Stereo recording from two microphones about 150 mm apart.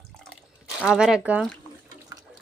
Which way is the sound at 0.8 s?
5° right (ahead or behind).